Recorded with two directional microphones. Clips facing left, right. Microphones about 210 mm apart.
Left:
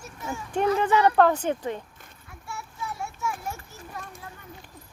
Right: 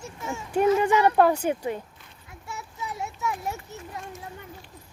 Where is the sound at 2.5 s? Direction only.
20° right (ahead or behind).